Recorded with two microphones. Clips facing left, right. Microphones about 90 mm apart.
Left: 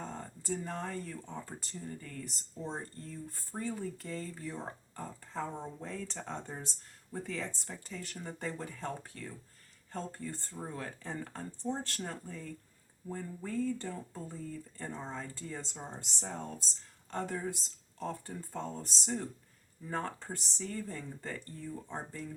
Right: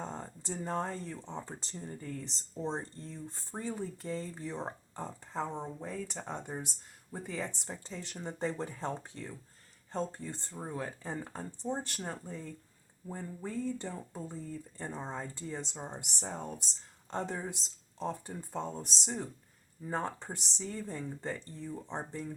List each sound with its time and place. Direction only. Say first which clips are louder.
0.0 s speech: right 2 dB; 20° right (ahead or behind)